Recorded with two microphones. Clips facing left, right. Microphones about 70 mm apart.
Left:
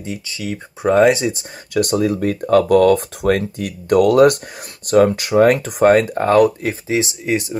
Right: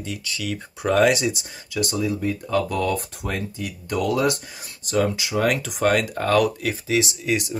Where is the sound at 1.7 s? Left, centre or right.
Left.